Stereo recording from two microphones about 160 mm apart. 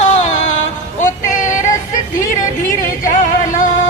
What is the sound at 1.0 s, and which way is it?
Child singing, 55° left (ahead or behind).